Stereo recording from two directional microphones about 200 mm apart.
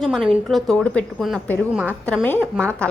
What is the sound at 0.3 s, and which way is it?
A woman's voice, centre (ahead or behind).